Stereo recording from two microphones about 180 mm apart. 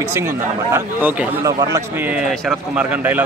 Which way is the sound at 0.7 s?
15° right (ahead or behind).